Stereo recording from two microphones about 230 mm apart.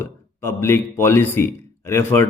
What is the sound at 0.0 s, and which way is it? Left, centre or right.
A man's voice, centre.